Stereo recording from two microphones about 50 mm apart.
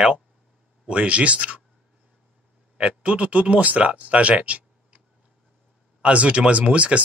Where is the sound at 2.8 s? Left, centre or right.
Right.